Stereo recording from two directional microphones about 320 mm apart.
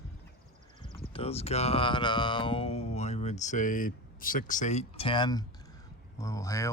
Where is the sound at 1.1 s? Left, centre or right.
Centre.